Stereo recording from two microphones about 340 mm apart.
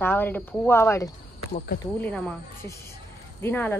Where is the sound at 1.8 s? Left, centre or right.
Centre.